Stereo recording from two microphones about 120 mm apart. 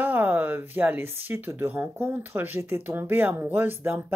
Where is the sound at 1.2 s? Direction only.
15° right (ahead or behind).